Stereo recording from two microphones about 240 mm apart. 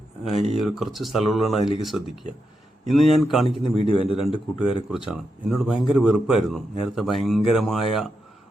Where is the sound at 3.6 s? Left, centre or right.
Left.